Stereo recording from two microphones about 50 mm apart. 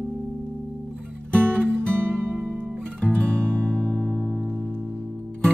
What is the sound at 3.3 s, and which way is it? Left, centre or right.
Music, right.